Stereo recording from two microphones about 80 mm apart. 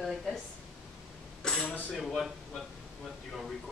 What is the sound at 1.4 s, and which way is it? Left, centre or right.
Throat clearing, centre.